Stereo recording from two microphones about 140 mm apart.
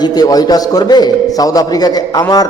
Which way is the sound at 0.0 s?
30° left (ahead or behind).